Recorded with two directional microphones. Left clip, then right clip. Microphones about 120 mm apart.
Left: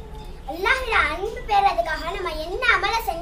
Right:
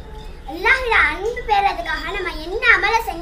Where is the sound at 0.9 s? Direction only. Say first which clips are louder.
Right 5 dB; 30° left (ahead or behind).